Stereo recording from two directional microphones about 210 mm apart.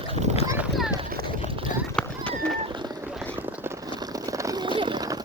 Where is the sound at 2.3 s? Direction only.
25° right (ahead or behind).